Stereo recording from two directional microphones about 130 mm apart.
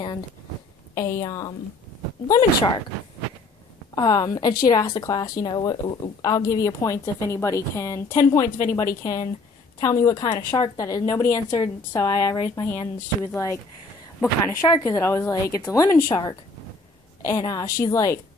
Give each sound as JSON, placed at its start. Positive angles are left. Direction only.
{"t": 0.9, "sound": "speech", "side_deg": 20}
{"t": 3.9, "sound": "speech", "side_deg": 30}
{"t": 17.2, "sound": "speech", "side_deg": 25}